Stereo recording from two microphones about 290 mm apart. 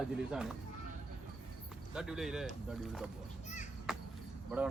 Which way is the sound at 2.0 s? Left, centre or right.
Centre.